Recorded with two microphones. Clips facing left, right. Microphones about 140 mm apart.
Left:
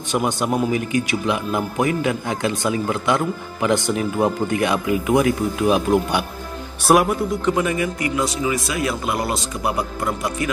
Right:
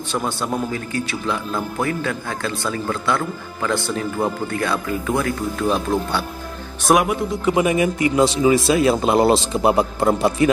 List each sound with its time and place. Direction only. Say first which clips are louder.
0.1 s a man's voice: left 3 dB; 15° left (ahead or behind); by 7.5 s centre (ahead or behind)
7.5 s speech: right 3 dB; 15° right (ahead or behind)